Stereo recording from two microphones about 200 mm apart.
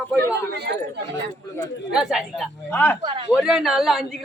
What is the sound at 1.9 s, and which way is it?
Speech, centre (ahead or behind).